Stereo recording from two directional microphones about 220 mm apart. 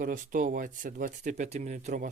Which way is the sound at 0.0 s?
35° right (ahead or behind).